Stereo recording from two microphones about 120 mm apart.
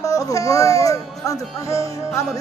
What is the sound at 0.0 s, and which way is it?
Speech, 30° left (ahead or behind).